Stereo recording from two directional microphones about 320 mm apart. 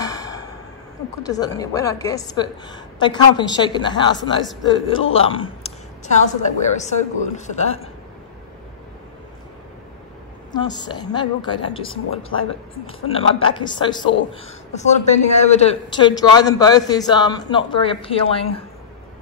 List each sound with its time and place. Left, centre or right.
0.0 s a sound: centre
1.2 s a man's voice: centre
10.5 s a man's voice: centre